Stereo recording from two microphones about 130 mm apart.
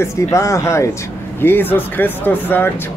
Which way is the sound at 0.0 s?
20° left (ahead or behind).